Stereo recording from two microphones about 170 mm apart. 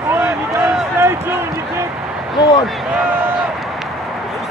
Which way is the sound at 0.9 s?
15° right (ahead or behind).